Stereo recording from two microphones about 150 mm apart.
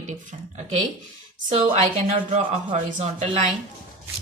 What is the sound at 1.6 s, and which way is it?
Speech, 50° right (ahead or behind).